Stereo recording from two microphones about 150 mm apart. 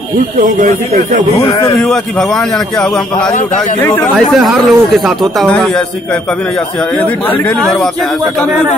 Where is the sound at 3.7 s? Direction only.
15° left (ahead or behind).